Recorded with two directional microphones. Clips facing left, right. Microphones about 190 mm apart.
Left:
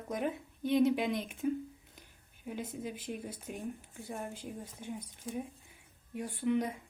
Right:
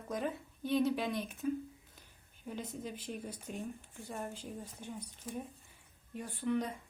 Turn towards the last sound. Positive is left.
turn(degrees=15)  # may be behind; listen again after turning